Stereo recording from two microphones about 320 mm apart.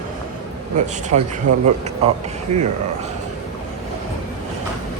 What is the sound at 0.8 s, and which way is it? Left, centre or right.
A man's voice, right.